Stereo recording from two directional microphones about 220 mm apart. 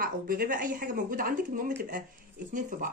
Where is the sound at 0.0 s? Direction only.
40° right (ahead or behind).